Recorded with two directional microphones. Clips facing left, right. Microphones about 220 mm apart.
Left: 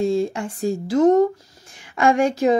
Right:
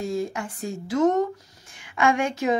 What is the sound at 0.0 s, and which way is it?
Speech, 30° left (ahead or behind).